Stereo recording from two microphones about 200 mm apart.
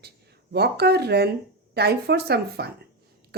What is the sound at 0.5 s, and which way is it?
Speech, 55° right (ahead or behind).